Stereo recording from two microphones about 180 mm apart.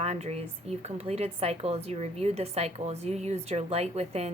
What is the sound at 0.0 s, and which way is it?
A woman's voice, 35° right (ahead or behind).